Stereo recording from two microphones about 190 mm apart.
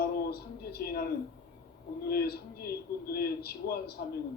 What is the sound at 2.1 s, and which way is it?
A man's voice, 55° left (ahead or behind).